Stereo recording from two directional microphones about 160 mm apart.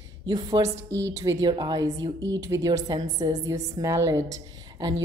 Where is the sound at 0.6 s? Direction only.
45° right (ahead or behind).